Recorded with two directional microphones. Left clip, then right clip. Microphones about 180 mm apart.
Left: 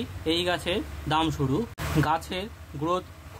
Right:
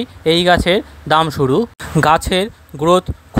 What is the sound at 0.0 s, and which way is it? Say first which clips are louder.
Speech: right 13 dB; 40° right (ahead or behind).